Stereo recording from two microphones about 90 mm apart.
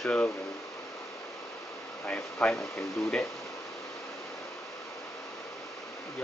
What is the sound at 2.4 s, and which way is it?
Speech, 5° left (ahead or behind).